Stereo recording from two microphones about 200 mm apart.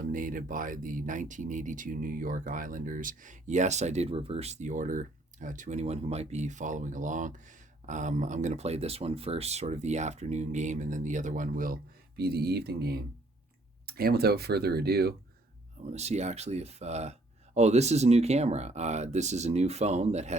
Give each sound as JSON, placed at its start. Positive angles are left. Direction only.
{"t": 0.0, "sound": "speech", "side_deg": -45}
{"t": 15.9, "sound": "speech", "side_deg": -35}